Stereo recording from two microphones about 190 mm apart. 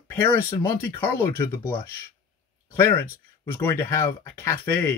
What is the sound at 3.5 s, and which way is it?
Speech, 10° left (ahead or behind).